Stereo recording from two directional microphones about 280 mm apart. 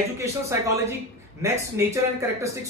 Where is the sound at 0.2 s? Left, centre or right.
Centre.